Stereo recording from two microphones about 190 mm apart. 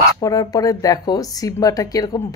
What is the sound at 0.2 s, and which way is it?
Speech, 20° left (ahead or behind).